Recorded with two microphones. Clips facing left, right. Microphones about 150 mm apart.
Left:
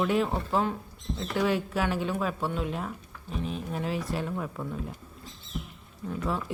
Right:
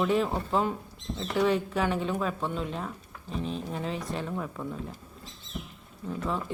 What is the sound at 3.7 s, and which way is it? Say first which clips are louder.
Speech: left 2 dB; 5° left (ahead or behind).